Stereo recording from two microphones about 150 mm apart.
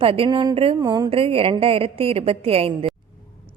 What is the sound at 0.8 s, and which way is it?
Speech, 25° right (ahead or behind).